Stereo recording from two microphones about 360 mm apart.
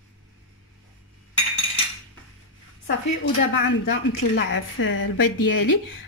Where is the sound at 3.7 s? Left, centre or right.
Left.